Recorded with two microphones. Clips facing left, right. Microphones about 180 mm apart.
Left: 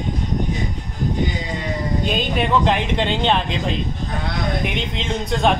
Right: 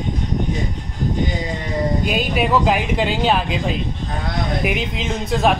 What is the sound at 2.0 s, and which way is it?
Speech, 5° right (ahead or behind).